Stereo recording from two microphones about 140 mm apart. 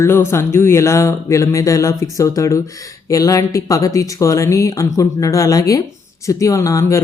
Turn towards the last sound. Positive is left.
turn(degrees=20)  # may be behind; listen again after turning